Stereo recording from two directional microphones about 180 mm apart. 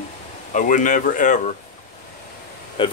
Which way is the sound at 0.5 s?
45° left (ahead or behind).